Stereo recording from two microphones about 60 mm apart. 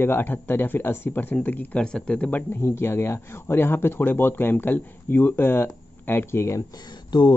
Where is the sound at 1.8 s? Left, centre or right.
Centre.